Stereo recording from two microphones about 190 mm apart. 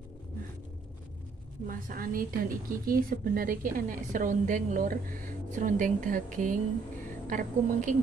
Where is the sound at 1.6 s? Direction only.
45° right (ahead or behind).